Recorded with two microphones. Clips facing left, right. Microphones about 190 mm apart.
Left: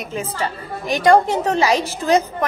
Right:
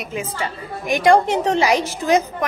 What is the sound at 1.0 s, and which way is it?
A woman's voice, 20° right (ahead or behind).